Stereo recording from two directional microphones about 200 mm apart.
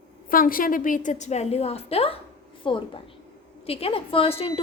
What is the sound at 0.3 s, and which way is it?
A woman's voice, 45° left (ahead or behind).